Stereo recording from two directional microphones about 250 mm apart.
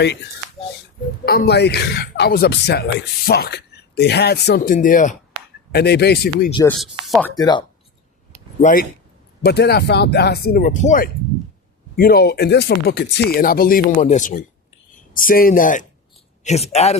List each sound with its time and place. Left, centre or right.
1.2 s a man's voice: left
6.7 s speech: centre
8.6 s a man's voice: left